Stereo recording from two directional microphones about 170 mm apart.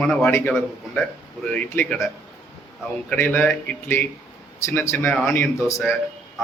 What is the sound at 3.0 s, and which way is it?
Speech, 10° left (ahead or behind).